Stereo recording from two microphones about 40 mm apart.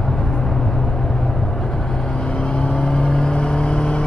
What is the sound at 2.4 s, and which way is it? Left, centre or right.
Vehicle, left.